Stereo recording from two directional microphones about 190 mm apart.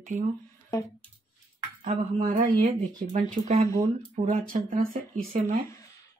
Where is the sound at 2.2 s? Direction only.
45° right (ahead or behind).